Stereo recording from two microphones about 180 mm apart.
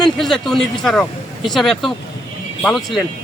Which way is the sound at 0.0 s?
Centre (ahead or behind).